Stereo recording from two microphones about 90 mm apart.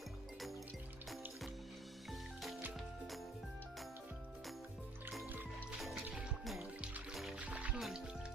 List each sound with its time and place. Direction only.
2.0 s music: centre (ahead or behind)
5.2 s music: 20° right (ahead or behind)
6.4 s music: centre (ahead or behind)
7.3 s music: 15° right (ahead or behind)
7.8 s music: 5° right (ahead or behind)